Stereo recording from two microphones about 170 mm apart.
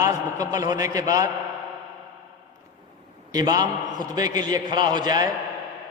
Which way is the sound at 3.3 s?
25° right (ahead or behind).